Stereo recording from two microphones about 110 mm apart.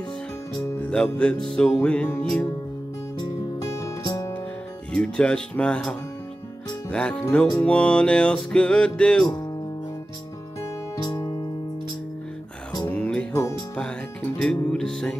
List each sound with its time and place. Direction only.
0.7 s music: 10° left (ahead or behind)
3.2 s music: 30° left (ahead or behind)
4.9 s music: 10° left (ahead or behind)
11.0 s music: 35° left (ahead or behind)
12.9 s music: 10° left (ahead or behind)
14.4 s music: 5° left (ahead or behind)